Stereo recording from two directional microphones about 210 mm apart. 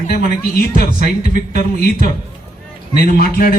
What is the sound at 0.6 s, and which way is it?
Speech, 45° left (ahead or behind).